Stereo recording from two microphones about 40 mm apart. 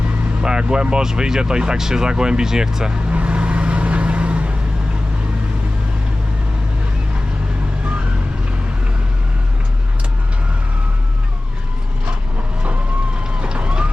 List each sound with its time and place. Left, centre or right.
0.4 s speech: right
3.1 s vehicle: right
13.4 s vehicle: right